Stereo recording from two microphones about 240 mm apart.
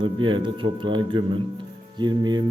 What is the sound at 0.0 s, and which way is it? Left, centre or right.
A man's voice, centre.